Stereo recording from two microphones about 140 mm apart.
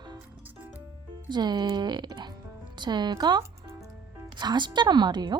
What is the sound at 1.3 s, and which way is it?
A woman's voice, 30° right (ahead or behind).